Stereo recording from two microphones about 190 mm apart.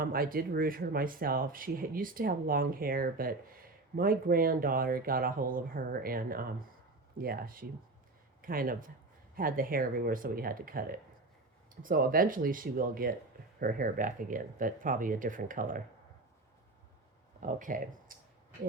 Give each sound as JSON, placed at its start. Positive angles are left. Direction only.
{"t": 0.0, "sound": "speech", "side_deg": -50}
{"t": 17.4, "sound": "speech", "side_deg": -45}